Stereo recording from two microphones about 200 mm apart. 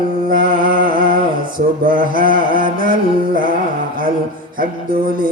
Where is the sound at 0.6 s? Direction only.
45° right (ahead or behind).